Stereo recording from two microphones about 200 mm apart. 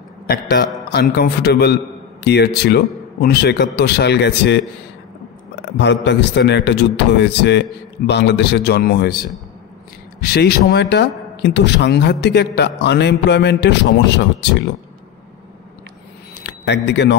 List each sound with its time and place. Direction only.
0.3 s a man's voice: 50° left (ahead or behind)
5.7 s a man's voice: 65° left (ahead or behind)
16.4 s speech: 60° left (ahead or behind)